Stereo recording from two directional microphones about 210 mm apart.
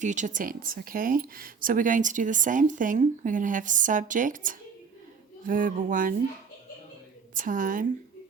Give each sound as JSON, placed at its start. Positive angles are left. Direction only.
{"t": 0.0, "sound": "speech", "side_deg": -35}
{"t": 7.3, "sound": "speech", "side_deg": -40}